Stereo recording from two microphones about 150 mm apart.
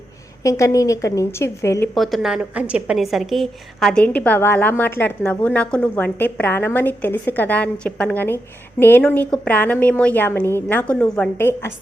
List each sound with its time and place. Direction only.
0.4 s a woman's voice: 20° left (ahead or behind)
2.0 s a woman's voice: centre (ahead or behind)